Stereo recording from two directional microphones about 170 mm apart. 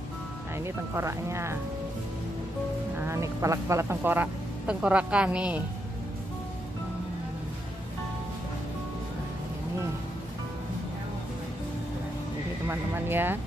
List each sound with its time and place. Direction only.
0.7 s speech: 15° right (ahead or behind)
3.0 s speech: 15° right (ahead or behind)
12.6 s speech: 15° right (ahead or behind)